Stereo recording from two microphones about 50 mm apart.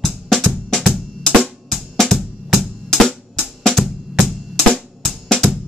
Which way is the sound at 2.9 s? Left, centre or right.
Centre.